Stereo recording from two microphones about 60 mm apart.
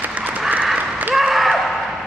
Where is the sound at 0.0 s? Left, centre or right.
Right.